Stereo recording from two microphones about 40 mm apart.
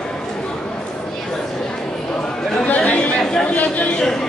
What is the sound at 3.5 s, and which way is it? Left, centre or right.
Speech, left.